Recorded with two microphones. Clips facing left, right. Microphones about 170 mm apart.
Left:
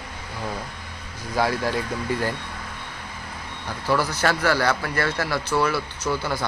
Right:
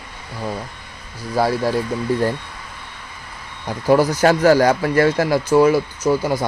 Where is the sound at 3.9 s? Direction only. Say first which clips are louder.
Right 8 dB; 45° right (ahead or behind).